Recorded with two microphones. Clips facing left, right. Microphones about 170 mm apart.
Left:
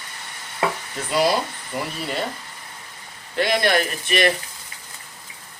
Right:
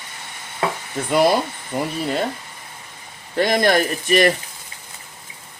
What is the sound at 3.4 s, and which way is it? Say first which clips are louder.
Speech: right 3 dB; 45° right (ahead or behind).